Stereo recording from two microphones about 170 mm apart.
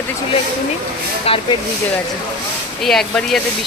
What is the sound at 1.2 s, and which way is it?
Speech, 35° left (ahead or behind).